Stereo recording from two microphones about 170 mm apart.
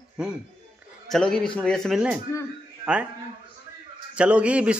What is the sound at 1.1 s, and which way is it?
Speech, 5° left (ahead or behind).